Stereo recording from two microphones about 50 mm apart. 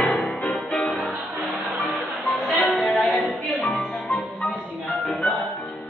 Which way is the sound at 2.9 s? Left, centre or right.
Centre.